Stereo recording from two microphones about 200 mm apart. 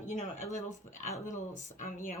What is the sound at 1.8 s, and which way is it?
Speech, 40° left (ahead or behind).